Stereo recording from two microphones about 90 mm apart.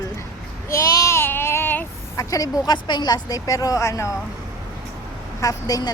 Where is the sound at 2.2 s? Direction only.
40° left (ahead or behind).